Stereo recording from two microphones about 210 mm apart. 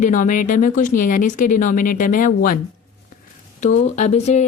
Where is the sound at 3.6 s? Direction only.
35° left (ahead or behind).